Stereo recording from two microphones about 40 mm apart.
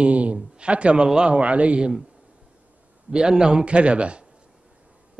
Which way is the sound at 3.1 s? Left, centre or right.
Centre.